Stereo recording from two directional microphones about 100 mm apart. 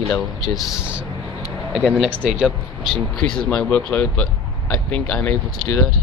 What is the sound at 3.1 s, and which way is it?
Speech, 10° left (ahead or behind).